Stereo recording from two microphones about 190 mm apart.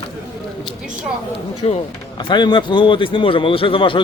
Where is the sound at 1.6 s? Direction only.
35° left (ahead or behind).